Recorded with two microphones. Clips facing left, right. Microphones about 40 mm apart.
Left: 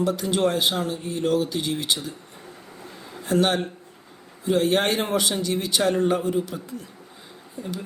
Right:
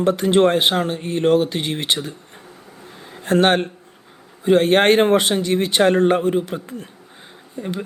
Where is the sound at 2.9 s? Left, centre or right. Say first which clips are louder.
Right 2 dB; right.